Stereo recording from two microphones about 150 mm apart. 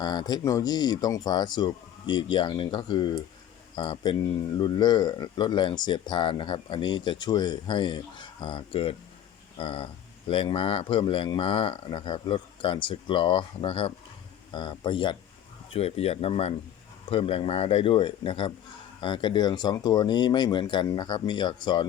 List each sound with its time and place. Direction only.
0.0 s speech: 25° left (ahead or behind)